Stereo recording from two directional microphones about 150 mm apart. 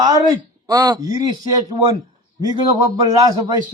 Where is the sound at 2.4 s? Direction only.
25° right (ahead or behind).